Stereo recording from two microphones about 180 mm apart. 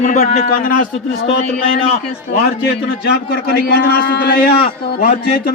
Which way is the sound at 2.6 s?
70° left (ahead or behind).